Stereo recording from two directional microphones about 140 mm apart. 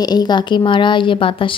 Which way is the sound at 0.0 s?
30° left (ahead or behind).